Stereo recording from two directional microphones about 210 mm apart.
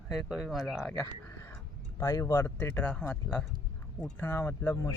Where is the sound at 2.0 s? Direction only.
15° left (ahead or behind).